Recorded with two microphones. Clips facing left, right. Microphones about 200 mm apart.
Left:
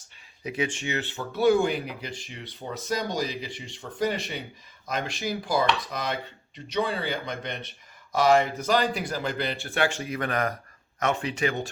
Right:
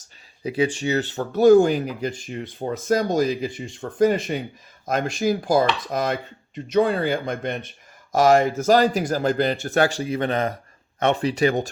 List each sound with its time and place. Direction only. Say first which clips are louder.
0.4 s speech: right 7 dB; 30° right (ahead or behind)